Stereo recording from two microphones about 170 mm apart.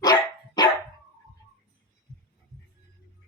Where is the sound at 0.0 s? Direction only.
25° left (ahead or behind).